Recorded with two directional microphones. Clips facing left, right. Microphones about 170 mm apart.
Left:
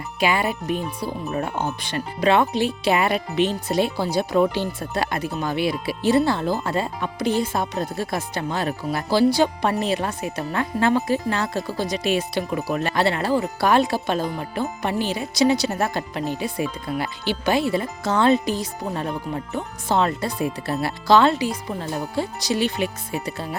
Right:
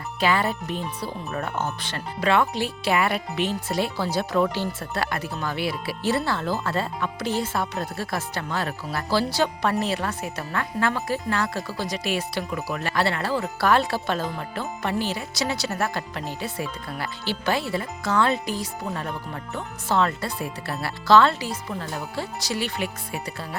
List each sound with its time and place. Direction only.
0.2 s speech: 15° left (ahead or behind)